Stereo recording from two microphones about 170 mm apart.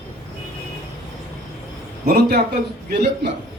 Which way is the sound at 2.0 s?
65° right (ahead or behind).